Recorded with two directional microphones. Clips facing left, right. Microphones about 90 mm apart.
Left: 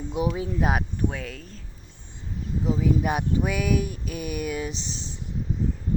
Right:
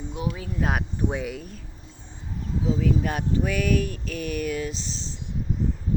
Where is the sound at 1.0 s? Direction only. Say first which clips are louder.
Right 2 dB; 15° right (ahead or behind).